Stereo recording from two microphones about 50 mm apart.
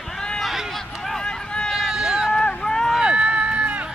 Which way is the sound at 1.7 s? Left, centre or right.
Centre.